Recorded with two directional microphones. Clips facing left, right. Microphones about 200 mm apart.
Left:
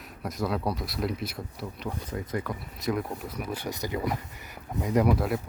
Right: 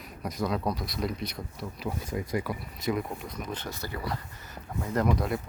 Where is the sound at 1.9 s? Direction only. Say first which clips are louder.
Right 2 dB; 10° right (ahead or behind).